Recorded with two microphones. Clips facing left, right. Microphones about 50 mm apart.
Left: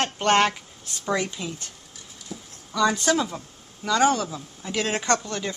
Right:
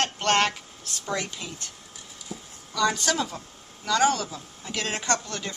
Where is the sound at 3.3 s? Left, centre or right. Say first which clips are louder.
Left 2 dB; centre.